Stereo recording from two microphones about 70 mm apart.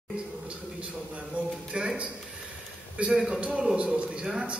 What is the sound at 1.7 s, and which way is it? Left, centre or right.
A man's voice, centre.